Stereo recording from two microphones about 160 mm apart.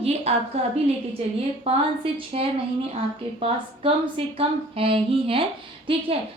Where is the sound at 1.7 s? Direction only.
35° right (ahead or behind).